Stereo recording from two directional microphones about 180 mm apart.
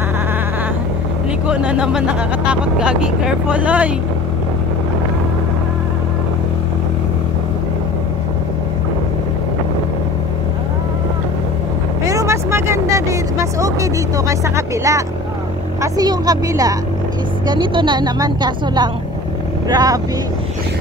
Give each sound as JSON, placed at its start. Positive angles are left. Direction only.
{"t": 1.5, "sound": "speech", "side_deg": -5}
{"t": 12.1, "sound": "vehicle", "side_deg": -15}
{"t": 15.8, "sound": "a woman's voice", "side_deg": -20}